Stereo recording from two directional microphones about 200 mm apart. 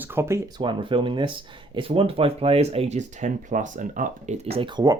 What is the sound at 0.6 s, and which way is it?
Speech, 25° right (ahead or behind).